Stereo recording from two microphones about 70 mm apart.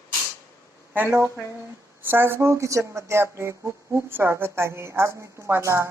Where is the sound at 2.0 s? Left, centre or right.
Right.